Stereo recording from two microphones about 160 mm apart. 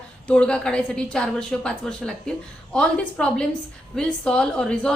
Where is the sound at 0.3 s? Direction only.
5° left (ahead or behind).